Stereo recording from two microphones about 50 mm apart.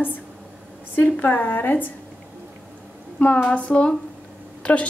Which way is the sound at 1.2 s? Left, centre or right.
Left.